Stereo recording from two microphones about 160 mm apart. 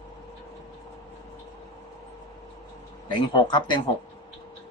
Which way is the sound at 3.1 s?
30° left (ahead or behind).